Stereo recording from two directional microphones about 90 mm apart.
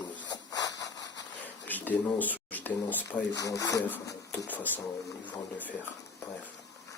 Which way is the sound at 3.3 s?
40° left (ahead or behind).